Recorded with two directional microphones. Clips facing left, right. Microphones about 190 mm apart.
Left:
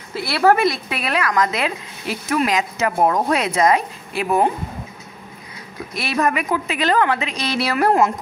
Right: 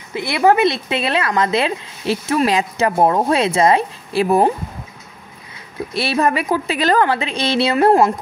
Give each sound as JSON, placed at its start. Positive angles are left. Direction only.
{"t": 0.1, "sound": "speech", "side_deg": -15}
{"t": 5.9, "sound": "a woman's voice", "side_deg": -30}